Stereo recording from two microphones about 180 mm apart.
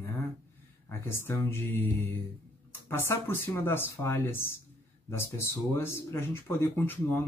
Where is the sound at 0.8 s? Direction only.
15° left (ahead or behind).